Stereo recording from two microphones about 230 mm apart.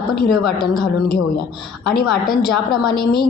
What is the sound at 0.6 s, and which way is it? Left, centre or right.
Speech, left.